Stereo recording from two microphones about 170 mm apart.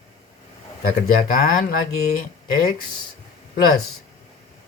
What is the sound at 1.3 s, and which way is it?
Speech, 55° left (ahead or behind).